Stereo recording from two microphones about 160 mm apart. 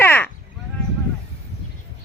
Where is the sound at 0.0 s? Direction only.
15° left (ahead or behind).